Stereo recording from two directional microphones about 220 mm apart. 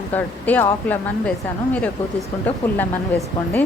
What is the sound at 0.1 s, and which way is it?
Speech, 10° left (ahead or behind).